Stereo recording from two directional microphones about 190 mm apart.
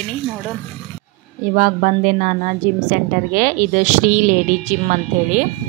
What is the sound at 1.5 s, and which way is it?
A woman's voice, 45° right (ahead or behind).